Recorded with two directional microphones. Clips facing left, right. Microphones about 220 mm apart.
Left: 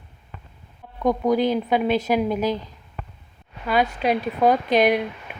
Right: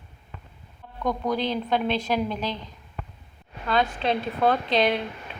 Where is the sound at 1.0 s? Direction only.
20° left (ahead or behind).